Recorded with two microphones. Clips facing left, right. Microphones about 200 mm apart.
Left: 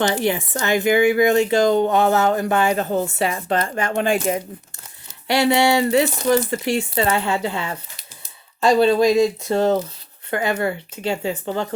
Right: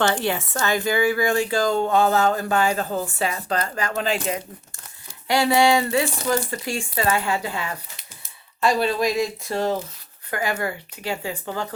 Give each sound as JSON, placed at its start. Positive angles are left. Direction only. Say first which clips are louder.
{"t": 0.0, "sound": "speech", "louder": "left 2 dB", "side_deg": 15}